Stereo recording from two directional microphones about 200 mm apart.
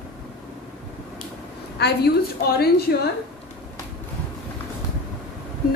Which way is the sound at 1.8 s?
55° left (ahead or behind).